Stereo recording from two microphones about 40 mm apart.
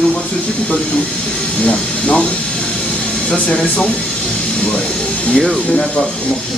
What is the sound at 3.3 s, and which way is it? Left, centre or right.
Speech, left.